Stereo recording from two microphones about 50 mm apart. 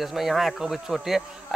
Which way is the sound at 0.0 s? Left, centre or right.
Centre.